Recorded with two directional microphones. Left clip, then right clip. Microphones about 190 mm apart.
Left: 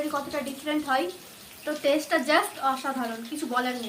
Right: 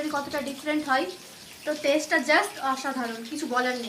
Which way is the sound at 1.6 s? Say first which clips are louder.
Even; 25° left (ahead or behind).